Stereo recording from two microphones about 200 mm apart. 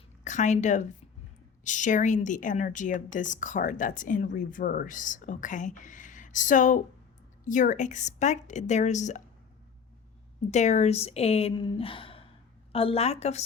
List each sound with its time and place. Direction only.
0.3 s a woman's voice: 35° left (ahead or behind)
10.5 s a woman's voice: 35° left (ahead or behind)